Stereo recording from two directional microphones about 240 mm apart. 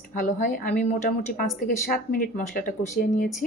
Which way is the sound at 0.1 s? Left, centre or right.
Left.